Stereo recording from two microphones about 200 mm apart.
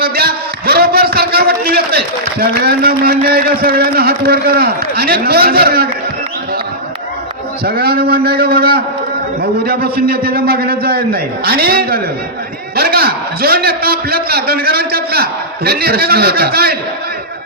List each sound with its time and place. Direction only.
0.0 s a sound: 50° right (ahead or behind)
2.6 s a man's voice: 50° right (ahead or behind)
7.6 s a man's voice: 50° right (ahead or behind)